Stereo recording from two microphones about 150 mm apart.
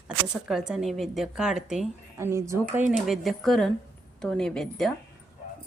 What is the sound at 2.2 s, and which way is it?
Speech, 20° right (ahead or behind).